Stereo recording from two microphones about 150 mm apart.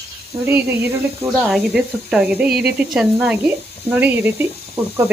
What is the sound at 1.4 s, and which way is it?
Speech, centre (ahead or behind).